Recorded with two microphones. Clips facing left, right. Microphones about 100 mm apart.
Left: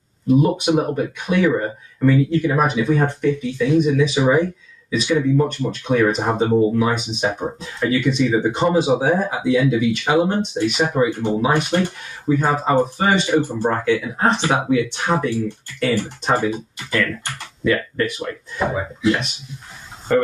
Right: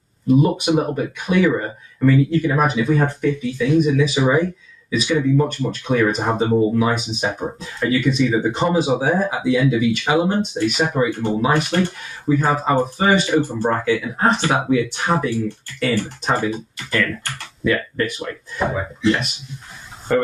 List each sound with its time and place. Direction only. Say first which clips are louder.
0.3 s speech: even; centre (ahead or behind)
15.1 s speech: left 1 dB; 20° left (ahead or behind)
17.6 s speech: left 1 dB; centre (ahead or behind)